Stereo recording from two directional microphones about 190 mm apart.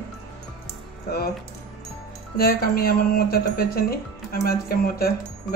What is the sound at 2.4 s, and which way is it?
Speech, 50° left (ahead or behind).